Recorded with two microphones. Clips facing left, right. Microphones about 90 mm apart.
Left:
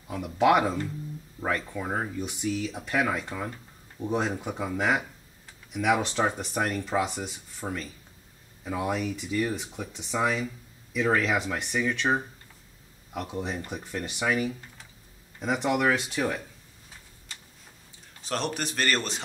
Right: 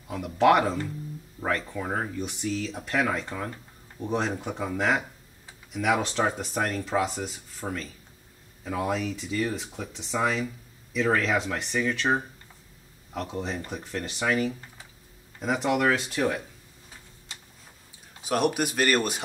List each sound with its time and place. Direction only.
0.1 s speech: 5° left (ahead or behind)
18.2 s speech: 10° right (ahead or behind)